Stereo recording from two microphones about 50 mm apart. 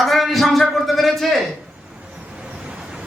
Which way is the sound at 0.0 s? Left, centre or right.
Centre.